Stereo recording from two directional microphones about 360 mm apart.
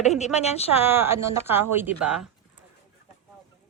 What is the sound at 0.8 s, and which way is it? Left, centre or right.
Speech, centre.